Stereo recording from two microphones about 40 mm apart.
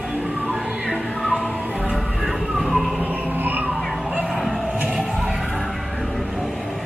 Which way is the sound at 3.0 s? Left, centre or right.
Right.